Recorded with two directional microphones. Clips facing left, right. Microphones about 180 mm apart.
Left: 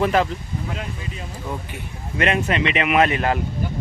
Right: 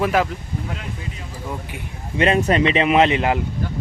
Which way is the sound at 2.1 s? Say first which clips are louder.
Right 4 dB; 30° right (ahead or behind).